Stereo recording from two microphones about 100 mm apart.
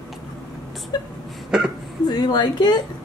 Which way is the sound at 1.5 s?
5° right (ahead or behind).